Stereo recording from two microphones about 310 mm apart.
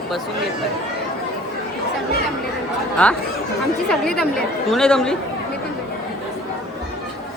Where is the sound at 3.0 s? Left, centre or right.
Centre.